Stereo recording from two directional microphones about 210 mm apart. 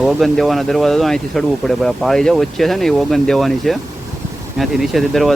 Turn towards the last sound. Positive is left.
turn(degrees=0)  # may be behind; listen again after turning